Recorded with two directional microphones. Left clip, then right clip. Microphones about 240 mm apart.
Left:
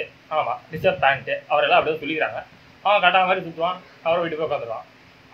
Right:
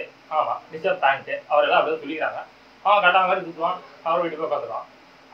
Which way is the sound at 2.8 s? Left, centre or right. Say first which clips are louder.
Even; left.